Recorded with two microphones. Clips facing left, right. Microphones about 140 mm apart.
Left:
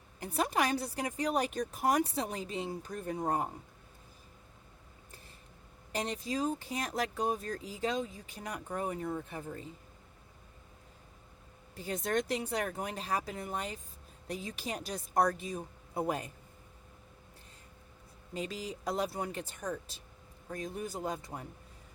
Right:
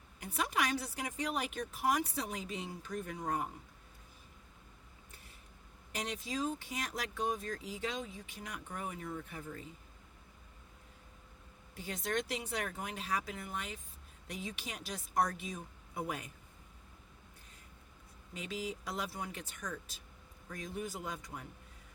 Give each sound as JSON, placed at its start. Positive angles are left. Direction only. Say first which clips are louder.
{"t": 0.3, "sound": "speech", "louder": "left 4 dB", "side_deg": 35}
{"t": 5.9, "sound": "speech", "louder": "left 4 dB", "side_deg": 35}
{"t": 11.8, "sound": "speech", "louder": "left 4 dB", "side_deg": 40}
{"t": 18.3, "sound": "speech", "louder": "left 2 dB", "side_deg": 40}
{"t": 19.3, "sound": "speech", "louder": "left 6 dB", "side_deg": 35}